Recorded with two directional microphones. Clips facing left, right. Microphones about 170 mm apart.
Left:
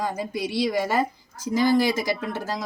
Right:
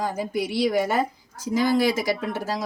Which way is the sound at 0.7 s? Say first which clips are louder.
Right 1 dB; 5° right (ahead or behind).